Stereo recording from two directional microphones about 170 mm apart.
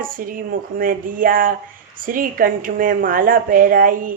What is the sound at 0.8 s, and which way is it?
A woman's voice, 55° right (ahead or behind).